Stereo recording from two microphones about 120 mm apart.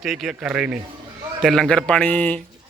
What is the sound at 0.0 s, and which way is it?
Speech, centre (ahead or behind).